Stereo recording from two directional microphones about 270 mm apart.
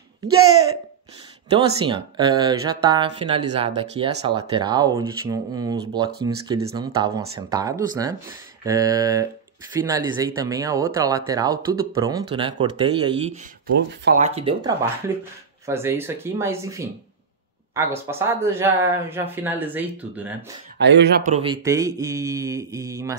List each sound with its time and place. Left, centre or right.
1.5 s speech: centre
20.8 s speech: right
21.3 s speech: centre